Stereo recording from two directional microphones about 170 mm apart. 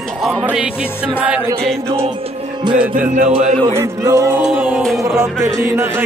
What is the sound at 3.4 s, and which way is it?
Music, 15° right (ahead or behind).